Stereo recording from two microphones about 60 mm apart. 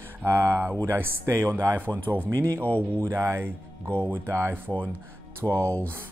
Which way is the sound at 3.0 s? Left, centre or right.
Right.